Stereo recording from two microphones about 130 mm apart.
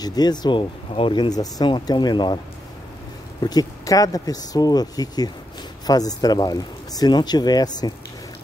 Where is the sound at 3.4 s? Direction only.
30° left (ahead or behind).